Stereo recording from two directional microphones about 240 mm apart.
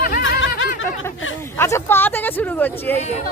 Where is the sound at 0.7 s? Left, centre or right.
Left.